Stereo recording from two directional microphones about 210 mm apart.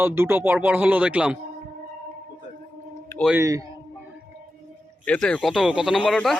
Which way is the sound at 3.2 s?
10° right (ahead or behind).